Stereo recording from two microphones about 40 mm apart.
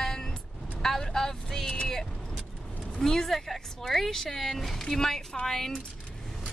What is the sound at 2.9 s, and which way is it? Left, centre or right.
Speech, centre.